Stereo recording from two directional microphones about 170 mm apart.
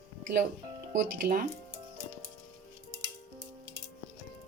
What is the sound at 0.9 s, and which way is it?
Speech, 55° right (ahead or behind).